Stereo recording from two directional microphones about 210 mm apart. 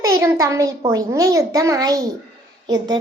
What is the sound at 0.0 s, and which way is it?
A child's voice, 15° right (ahead or behind).